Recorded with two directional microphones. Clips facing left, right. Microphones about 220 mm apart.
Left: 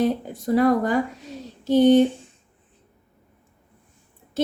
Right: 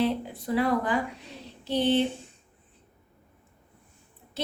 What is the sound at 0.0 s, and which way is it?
Speech, 45° left (ahead or behind).